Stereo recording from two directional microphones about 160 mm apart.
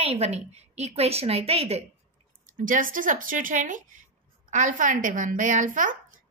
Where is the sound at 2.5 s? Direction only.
60° right (ahead or behind).